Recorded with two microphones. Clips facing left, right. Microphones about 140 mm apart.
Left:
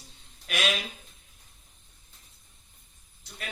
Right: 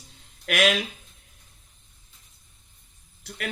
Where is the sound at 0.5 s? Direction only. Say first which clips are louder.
Right 7 dB; 90° right.